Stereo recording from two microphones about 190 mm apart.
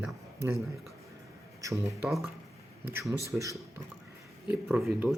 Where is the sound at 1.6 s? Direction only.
15° right (ahead or behind).